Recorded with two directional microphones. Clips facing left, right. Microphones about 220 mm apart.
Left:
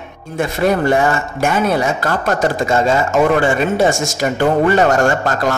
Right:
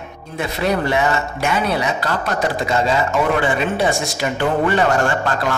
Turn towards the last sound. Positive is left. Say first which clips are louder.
# left 3 dB
turn(degrees=45)  # may be behind; listen again after turning